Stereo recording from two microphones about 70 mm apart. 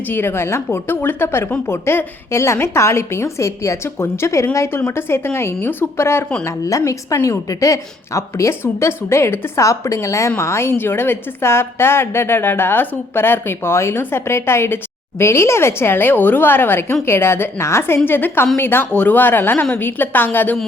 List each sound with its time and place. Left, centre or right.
0.1 s a woman's voice: left
6.4 s a woman's voice: left